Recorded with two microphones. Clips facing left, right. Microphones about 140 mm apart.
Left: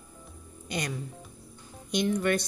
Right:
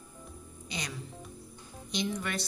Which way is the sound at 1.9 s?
55° left (ahead or behind).